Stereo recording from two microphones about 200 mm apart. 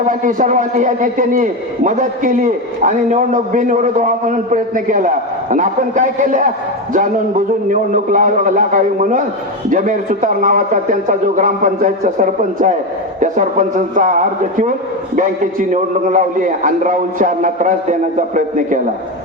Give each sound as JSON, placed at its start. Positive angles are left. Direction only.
{"t": 0.1, "sound": "a man's voice", "side_deg": -40}